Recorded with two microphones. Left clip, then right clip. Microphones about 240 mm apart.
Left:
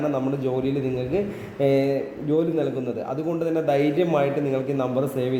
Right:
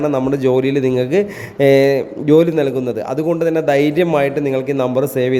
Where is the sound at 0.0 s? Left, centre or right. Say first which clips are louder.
Right 9 dB; right.